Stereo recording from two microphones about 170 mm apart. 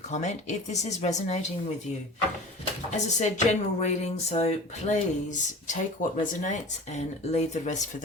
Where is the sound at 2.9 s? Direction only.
45° left (ahead or behind).